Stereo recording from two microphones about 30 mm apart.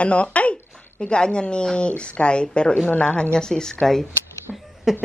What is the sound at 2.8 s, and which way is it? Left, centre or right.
Speech, left.